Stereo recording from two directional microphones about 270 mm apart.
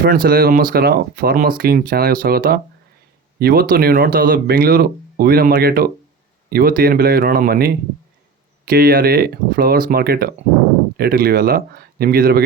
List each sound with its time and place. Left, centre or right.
0.0 s speech: right